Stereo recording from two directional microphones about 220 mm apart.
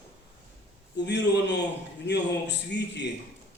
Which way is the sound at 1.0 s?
50° left (ahead or behind).